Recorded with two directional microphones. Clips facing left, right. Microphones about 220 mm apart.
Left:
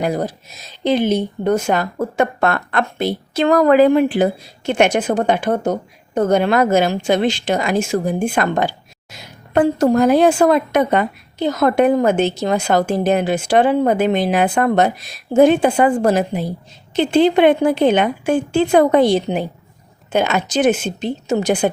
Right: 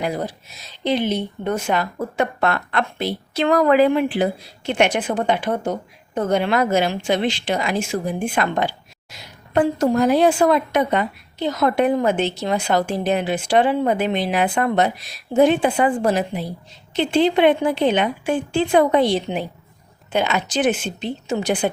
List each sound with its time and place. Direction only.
0.0 s a woman's voice: 45° left (ahead or behind)